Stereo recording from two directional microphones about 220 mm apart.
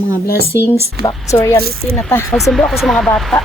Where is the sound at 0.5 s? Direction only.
15° left (ahead or behind).